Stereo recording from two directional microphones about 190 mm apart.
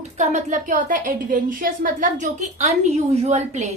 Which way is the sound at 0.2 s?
40° right (ahead or behind).